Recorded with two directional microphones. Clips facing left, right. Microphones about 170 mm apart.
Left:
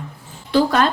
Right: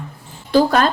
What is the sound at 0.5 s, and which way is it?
Speech, 45° right (ahead or behind).